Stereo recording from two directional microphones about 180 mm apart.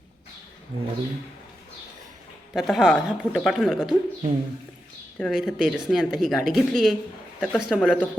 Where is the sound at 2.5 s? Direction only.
Centre (ahead or behind).